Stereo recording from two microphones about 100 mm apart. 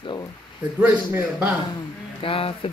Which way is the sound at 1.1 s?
20° right (ahead or behind).